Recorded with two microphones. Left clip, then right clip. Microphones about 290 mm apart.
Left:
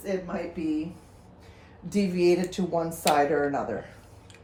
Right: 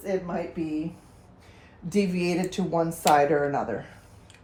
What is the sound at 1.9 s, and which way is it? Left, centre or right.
Speech, right.